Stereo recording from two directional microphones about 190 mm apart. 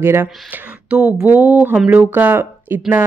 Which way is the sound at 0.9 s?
5° right (ahead or behind).